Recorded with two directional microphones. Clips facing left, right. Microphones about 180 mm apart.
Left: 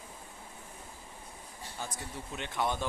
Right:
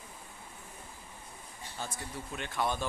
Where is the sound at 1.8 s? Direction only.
20° left (ahead or behind).